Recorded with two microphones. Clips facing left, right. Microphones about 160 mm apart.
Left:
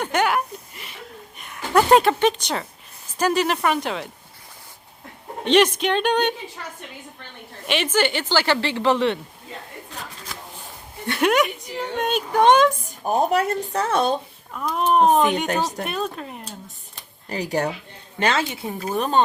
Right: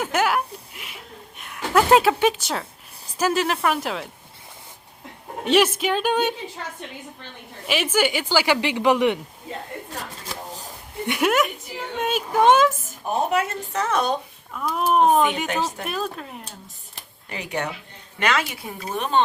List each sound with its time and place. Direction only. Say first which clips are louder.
0.0 s a sound: left 1 dB; 5° right (ahead or behind)
1.4 s a woman's voice: left 1 dB; centre (ahead or behind)
5.5 s a woman's voice: left 2 dB; 5° right (ahead or behind)
7.7 s a woman's voice: even; 10° right (ahead or behind)
10.2 s a sound: right 4 dB; 40° right (ahead or behind)
11.0 s speech: left 1 dB; 15° right (ahead or behind)
11.3 s a woman's voice: left 3 dB; centre (ahead or behind)
13.1 s speech: left 3 dB; 35° left (ahead or behind)
14.5 s a woman's voice: left 1 dB; 5° right (ahead or behind)
15.4 s speech: left 2 dB; 40° left (ahead or behind)
15.9 s a woman's voice: left 1 dB; centre (ahead or behind)
17.2 s speech: left 5 dB; 35° left (ahead or behind)
18.9 s speech: left 1 dB; 40° left (ahead or behind)